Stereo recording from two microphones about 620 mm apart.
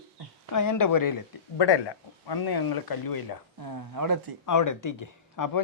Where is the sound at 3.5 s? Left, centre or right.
Right.